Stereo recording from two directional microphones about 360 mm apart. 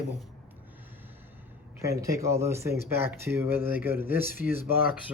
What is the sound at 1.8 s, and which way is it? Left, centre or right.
Speech, centre.